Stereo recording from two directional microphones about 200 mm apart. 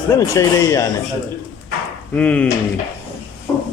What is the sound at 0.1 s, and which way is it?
Speech, 15° left (ahead or behind).